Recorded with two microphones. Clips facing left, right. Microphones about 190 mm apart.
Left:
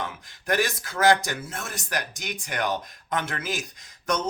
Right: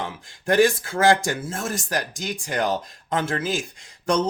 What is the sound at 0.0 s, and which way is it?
Speech, 30° right (ahead or behind).